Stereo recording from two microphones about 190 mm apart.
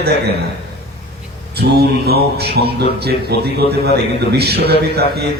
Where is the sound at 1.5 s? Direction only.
55° right (ahead or behind).